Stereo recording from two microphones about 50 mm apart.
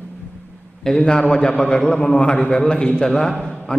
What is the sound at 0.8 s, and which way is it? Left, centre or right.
A man's voice, centre.